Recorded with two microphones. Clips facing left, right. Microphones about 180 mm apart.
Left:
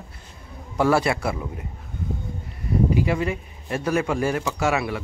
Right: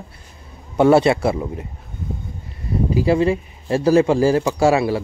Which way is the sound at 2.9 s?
30° right (ahead or behind).